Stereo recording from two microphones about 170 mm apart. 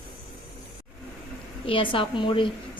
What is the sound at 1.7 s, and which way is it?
Speech, 30° left (ahead or behind).